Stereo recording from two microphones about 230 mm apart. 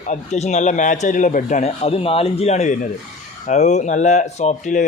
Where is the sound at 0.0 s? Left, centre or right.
Left.